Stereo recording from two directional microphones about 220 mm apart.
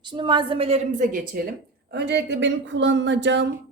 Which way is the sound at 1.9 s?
50° right (ahead or behind).